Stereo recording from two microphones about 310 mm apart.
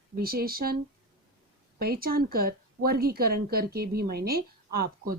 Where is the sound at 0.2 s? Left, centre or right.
Right.